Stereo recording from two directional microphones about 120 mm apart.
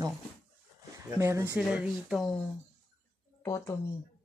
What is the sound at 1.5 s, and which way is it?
Speech, 10° right (ahead or behind).